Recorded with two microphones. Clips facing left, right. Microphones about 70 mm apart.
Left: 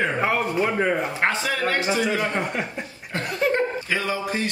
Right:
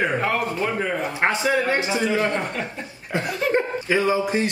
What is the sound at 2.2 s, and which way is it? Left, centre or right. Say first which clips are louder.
Speech: right 1 dB; centre.